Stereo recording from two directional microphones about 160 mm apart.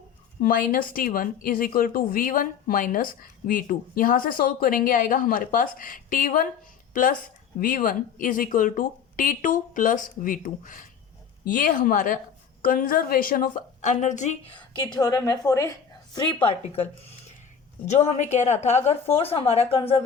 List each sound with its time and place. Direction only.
0.4 s speech: 60° left (ahead or behind)
14.8 s a woman's voice: 25° left (ahead or behind)
16.1 s a woman's voice: 30° left (ahead or behind)